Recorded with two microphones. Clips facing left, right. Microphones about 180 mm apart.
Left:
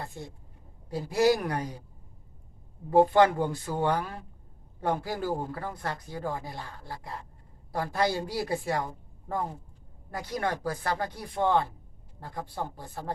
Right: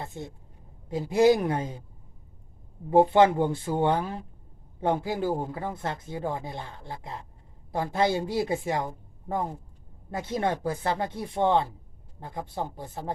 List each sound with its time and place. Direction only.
0.0 s speech: 20° right (ahead or behind)
2.9 s speech: 20° right (ahead or behind)
10.1 s speech: 25° right (ahead or behind)